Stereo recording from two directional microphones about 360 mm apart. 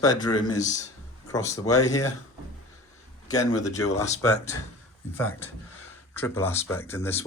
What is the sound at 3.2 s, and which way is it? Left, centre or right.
Speech, centre.